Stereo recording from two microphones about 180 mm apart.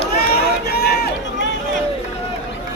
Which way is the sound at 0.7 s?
65° left (ahead or behind).